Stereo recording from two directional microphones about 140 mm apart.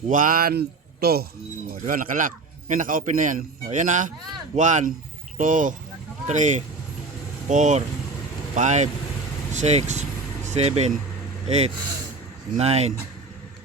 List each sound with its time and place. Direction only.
0.1 s speech: 80° right
1.9 s a man's voice: 80° right; by 12.9 s 50° right (ahead or behind)